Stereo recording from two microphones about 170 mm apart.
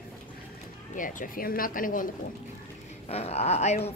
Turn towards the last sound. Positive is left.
turn(degrees=40)  # may be behind; listen again after turning